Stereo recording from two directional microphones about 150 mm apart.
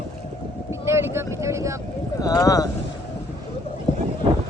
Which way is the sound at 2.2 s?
25° left (ahead or behind).